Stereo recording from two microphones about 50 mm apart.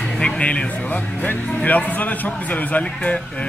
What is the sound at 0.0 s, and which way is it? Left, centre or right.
Speech, centre.